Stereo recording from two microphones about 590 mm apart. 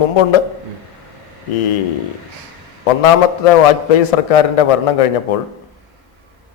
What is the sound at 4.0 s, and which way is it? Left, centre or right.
A man's voice, left.